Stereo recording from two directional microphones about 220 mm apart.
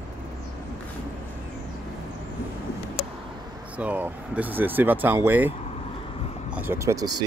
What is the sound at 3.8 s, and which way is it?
Speech, 5° right (ahead or behind).